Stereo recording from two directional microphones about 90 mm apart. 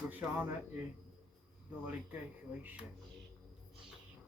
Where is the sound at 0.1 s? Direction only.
20° right (ahead or behind).